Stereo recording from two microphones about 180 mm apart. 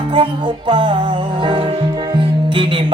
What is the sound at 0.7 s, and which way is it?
Music, 25° right (ahead or behind).